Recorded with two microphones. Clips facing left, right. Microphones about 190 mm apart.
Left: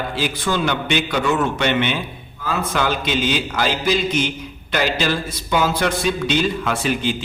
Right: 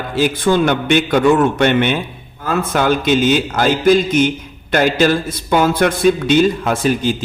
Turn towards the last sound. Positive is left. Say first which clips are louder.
# right 5 dB
turn(degrees=-45)  # may be behind; listen again after turning